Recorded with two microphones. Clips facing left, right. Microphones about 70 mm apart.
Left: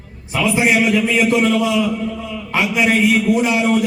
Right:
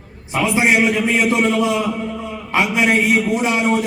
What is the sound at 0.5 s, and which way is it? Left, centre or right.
A man's voice, right.